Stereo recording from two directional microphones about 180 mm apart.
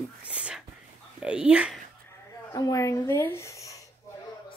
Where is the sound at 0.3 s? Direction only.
5° right (ahead or behind).